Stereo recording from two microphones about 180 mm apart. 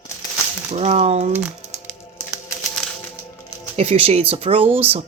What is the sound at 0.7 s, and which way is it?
Speech, 35° right (ahead or behind).